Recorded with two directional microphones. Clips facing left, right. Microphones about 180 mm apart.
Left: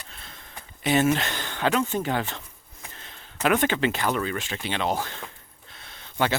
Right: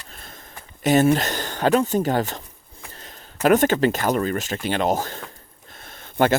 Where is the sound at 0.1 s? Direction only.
45° right (ahead or behind).